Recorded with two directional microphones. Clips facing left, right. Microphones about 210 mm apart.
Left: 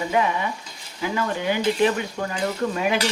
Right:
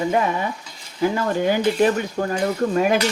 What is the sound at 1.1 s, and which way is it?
Speech, 40° right (ahead or behind).